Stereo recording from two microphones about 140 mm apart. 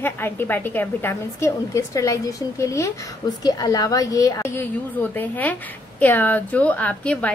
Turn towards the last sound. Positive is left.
turn(degrees=10)  # may be behind; listen again after turning